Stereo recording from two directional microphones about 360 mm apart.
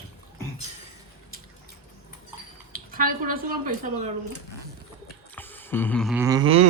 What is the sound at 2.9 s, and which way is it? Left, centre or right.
A woman's voice, right.